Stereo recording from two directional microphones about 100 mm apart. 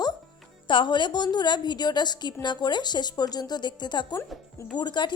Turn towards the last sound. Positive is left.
turn(degrees=50)  # may be behind; listen again after turning